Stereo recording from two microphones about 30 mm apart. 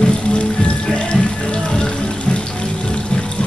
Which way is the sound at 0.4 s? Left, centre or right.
Left.